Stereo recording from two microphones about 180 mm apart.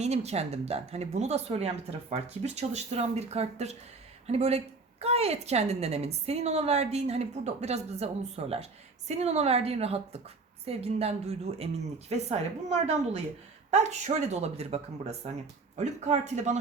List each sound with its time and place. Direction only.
0.0 s a woman's voice: 35° right (ahead or behind)